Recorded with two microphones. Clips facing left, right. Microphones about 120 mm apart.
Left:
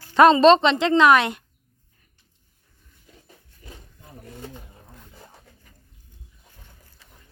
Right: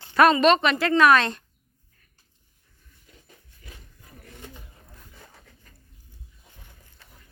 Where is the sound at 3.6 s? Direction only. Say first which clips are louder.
Left 4 dB; 35° left (ahead or behind).